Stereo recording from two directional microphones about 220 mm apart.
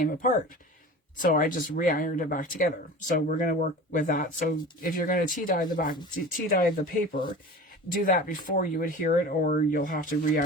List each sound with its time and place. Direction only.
0.0 s speech: 35° left (ahead or behind)